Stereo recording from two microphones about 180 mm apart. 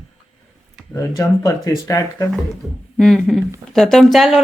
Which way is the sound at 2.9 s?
Centre (ahead or behind).